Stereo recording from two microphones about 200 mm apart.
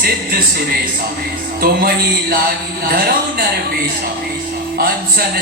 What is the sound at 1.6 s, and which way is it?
A man's voice, 50° right (ahead or behind).